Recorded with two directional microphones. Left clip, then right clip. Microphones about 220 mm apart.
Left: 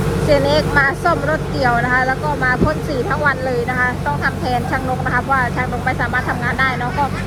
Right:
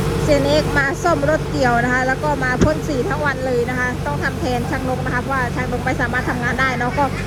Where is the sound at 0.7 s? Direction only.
20° right (ahead or behind).